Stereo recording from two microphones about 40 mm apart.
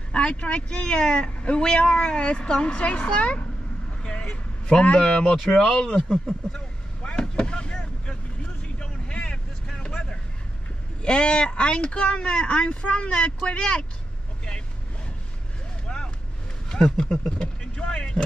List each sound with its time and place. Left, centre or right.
0.1 s speech: left
4.0 s vehicle: left
5.1 s speech: centre
6.5 s vehicle: left
11.0 s speech: left
15.9 s vehicle: left
16.6 s a sound: centre
17.8 s speech: centre